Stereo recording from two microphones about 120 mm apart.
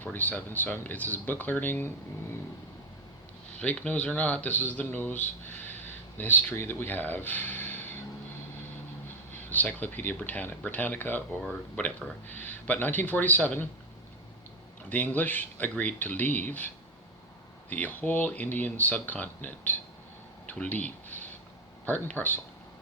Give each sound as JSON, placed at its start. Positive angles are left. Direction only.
{"t": 0.0, "sound": "speech", "side_deg": 15}
{"t": 3.6, "sound": "speech", "side_deg": 10}
{"t": 9.5, "sound": "speech", "side_deg": 15}
{"t": 14.8, "sound": "speech", "side_deg": 15}